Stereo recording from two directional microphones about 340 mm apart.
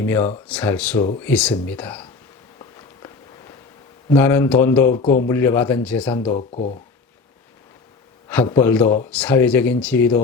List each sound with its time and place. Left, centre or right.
0.0 s speech: centre
2.6 s walk: centre
4.2 s speech: centre
4.9 s a man's voice: left
5.3 s speech: centre
8.3 s speech: centre